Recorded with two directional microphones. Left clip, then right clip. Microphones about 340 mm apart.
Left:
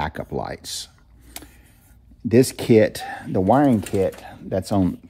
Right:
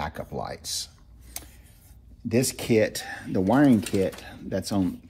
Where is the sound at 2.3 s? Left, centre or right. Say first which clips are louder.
Left 8 dB; left.